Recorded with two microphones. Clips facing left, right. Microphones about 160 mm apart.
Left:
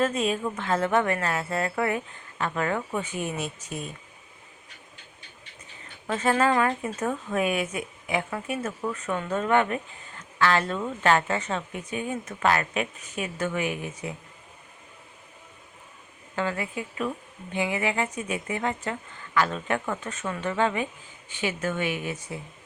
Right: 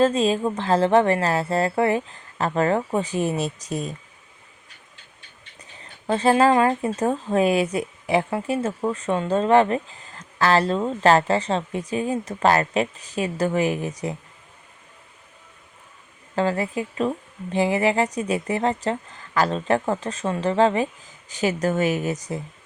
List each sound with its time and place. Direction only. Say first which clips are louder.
0.0 s speech: right 6 dB; 30° right (ahead or behind)
5.8 s speech: right 6 dB; 30° right (ahead or behind)
16.3 s speech: right 6 dB; 35° right (ahead or behind)